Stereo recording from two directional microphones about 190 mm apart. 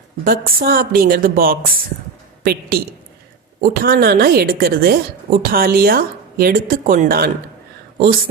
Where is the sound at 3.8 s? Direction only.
50° right (ahead or behind).